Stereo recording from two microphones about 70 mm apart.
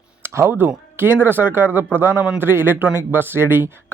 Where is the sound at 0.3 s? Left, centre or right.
Right.